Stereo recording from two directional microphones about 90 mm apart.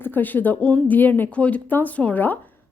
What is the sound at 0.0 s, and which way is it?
Speech, 20° left (ahead or behind).